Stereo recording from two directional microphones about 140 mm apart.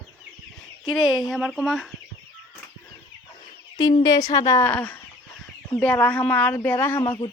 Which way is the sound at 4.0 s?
25° left (ahead or behind).